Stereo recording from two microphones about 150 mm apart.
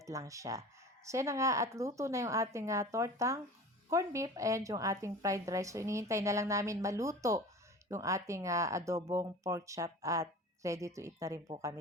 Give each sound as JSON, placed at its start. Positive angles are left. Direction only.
{"t": 0.0, "sound": "speech", "side_deg": -20}